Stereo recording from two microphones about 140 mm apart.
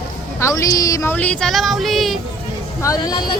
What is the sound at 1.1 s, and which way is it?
Child singing, 10° left (ahead or behind).